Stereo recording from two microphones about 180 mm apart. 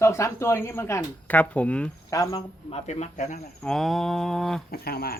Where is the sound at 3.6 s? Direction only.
Centre (ahead or behind).